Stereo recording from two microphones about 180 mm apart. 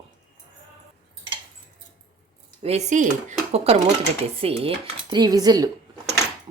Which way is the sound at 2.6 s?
40° right (ahead or behind).